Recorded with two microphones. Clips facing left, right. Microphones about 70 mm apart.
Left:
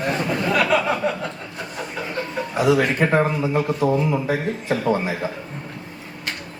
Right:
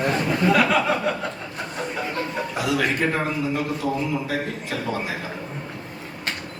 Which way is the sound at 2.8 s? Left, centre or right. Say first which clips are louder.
Left 4 dB; left.